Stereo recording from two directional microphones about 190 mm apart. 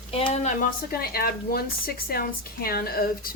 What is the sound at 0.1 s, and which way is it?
Speech, 30° left (ahead or behind).